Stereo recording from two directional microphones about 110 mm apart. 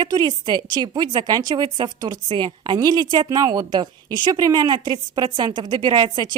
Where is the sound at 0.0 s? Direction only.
40° right (ahead or behind).